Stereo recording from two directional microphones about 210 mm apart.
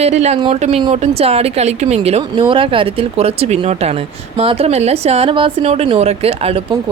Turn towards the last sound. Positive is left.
turn(degrees=-30)  # may be behind; listen again after turning